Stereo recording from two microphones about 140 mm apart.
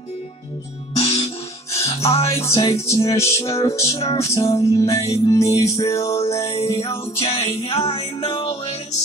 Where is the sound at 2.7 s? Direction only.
20° left (ahead or behind).